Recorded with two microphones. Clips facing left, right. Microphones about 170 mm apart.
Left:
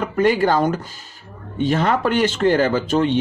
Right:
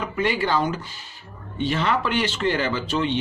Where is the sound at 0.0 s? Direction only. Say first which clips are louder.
Left 7 dB; 45° left (ahead or behind).